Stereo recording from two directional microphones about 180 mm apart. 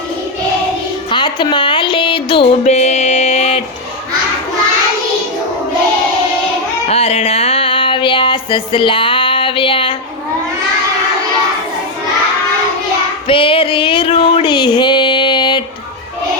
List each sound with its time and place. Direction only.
1.1 s music: 25° left (ahead or behind)
6.8 s music: 35° left (ahead or behind)
13.2 s a sound: 30° left (ahead or behind)